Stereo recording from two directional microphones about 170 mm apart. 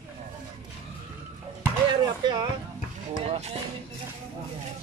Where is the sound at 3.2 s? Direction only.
35° right (ahead or behind).